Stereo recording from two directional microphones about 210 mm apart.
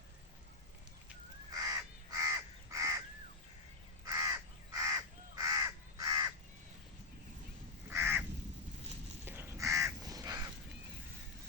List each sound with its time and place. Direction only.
1.5 s crow: 15° right (ahead or behind)
4.0 s crow: 15° right (ahead or behind)
7.9 s crow: 10° right (ahead or behind)
9.2 s crow: 10° right (ahead or behind)